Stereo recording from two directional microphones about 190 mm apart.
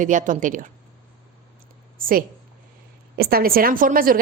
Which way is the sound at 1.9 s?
50° right (ahead or behind).